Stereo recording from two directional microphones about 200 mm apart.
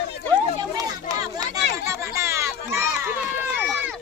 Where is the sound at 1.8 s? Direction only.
15° right (ahead or behind).